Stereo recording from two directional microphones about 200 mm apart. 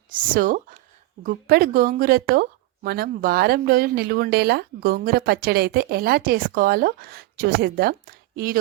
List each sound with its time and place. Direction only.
0.1 s speech: 45° right (ahead or behind)